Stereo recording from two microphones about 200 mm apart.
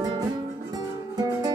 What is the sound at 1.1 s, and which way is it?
Music, 20° right (ahead or behind).